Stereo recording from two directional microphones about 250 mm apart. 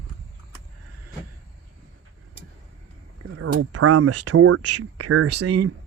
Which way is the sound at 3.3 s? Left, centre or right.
Right.